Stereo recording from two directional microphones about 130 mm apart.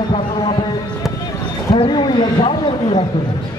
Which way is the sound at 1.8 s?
35° left (ahead or behind).